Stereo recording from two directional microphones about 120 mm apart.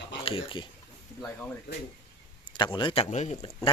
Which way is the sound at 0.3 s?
50° left (ahead or behind).